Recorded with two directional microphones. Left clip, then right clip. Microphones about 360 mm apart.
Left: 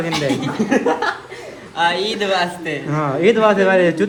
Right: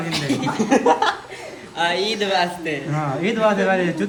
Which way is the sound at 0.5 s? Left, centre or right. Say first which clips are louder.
Right 3 dB; right.